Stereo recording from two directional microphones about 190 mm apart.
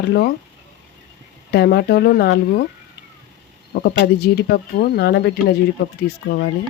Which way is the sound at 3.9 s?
60° left (ahead or behind).